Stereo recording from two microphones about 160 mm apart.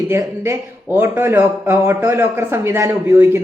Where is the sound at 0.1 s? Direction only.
15° right (ahead or behind).